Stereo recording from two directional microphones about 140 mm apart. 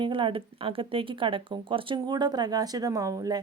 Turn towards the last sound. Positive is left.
turn(degrees=-25)  # may be behind; listen again after turning